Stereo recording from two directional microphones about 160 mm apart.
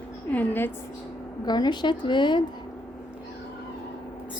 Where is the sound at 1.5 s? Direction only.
25° left (ahead or behind).